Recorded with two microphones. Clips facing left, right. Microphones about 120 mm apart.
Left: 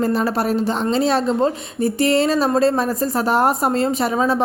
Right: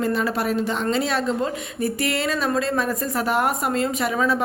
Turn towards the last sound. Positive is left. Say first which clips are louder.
# left 3 dB
turn(degrees=30)  # may be behind; listen again after turning